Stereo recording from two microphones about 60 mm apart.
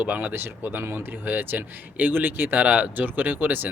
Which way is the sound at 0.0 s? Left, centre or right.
Right.